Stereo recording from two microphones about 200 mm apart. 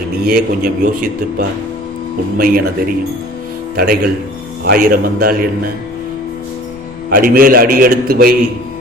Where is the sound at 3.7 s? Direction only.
50° right (ahead or behind).